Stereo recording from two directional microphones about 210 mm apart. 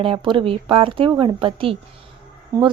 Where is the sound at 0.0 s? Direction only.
25° right (ahead or behind).